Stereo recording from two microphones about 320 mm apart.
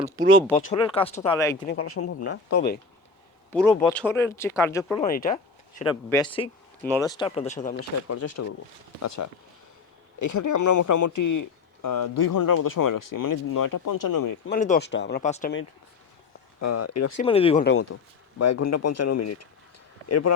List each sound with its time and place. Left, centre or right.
0.0 s speech: centre
0.7 s speech: centre
1.6 s speech: left
1.9 s speech: left
3.5 s a man's voice: centre
5.0 s speech: left
5.8 s speech: centre
7.8 s speech: left
14.4 s speech: left
16.6 s speech: left
17.2 s speech: centre
17.6 s speech: left
18.3 s speech: left